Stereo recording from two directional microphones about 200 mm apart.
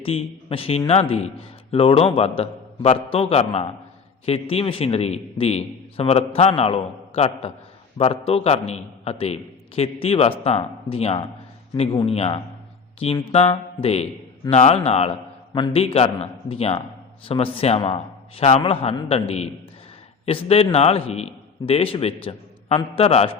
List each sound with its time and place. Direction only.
0.0 s a man's voice: 30° left (ahead or behind)